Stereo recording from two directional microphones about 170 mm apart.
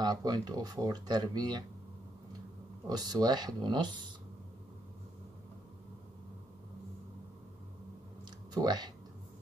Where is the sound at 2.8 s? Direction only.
25° right (ahead or behind).